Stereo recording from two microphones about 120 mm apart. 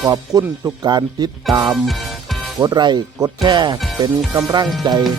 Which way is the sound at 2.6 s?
35° right (ahead or behind).